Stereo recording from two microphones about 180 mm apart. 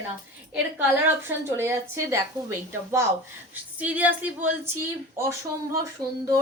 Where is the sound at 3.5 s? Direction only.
10° right (ahead or behind).